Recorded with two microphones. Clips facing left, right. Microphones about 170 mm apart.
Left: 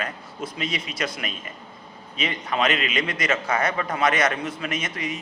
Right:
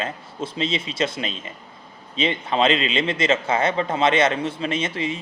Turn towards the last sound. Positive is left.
turn(degrees=-25)  # may be behind; listen again after turning